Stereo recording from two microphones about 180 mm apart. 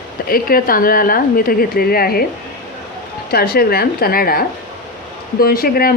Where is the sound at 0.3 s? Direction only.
55° left (ahead or behind).